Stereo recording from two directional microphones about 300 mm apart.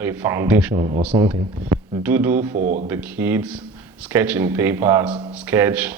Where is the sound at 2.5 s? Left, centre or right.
Right.